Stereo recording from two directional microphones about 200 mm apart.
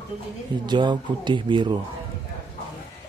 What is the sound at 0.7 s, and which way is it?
Speech, 20° right (ahead or behind).